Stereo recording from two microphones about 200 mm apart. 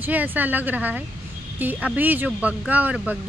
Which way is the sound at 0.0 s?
10° right (ahead or behind).